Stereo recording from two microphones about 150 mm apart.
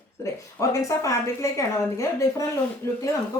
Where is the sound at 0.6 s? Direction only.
20° left (ahead or behind).